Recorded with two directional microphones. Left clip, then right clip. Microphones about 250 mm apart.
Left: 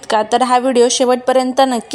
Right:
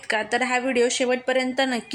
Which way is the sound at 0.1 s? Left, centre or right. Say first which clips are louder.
Left 10 dB; left.